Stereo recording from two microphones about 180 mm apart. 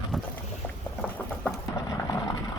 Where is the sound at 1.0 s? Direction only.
10° left (ahead or behind).